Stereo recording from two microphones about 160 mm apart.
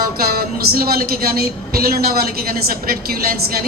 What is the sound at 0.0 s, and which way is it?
A woman's voice, 70° right (ahead or behind).